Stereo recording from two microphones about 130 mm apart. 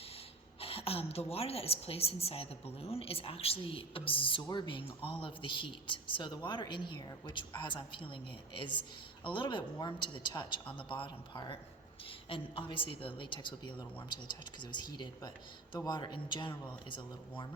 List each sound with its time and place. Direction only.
0.6 s a woman's voice: 45° left (ahead or behind)